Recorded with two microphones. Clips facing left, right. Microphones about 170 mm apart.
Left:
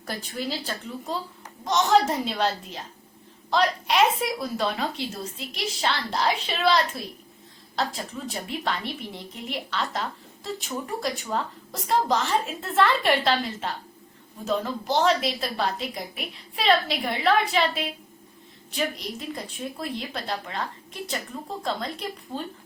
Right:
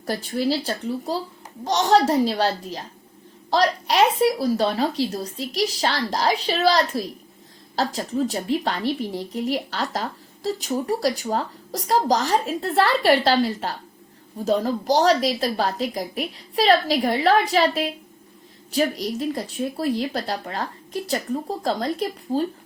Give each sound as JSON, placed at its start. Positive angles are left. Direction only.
{"t": 0.0, "sound": "speech", "side_deg": -35}